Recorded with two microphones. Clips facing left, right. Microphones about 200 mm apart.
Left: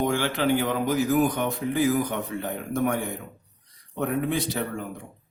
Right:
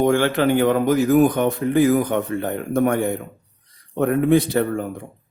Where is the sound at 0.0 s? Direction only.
55° right (ahead or behind).